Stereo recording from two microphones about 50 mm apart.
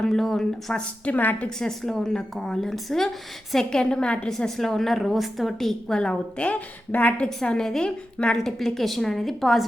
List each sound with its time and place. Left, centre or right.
0.0 s a woman's voice: centre
1.0 s a woman's voice: left
1.5 s a woman's voice: centre
4.3 s a woman's voice: centre
6.0 s a woman's voice: left
7.4 s a woman's voice: centre
8.4 s a woman's voice: centre